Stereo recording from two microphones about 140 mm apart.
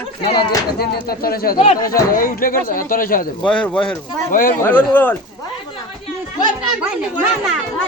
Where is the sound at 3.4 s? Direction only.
10° left (ahead or behind).